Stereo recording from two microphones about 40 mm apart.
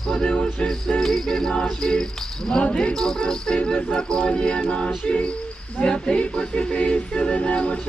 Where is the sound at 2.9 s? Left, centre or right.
Centre.